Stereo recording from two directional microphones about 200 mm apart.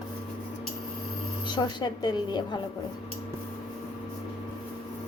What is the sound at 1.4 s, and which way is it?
A woman's voice, 20° left (ahead or behind).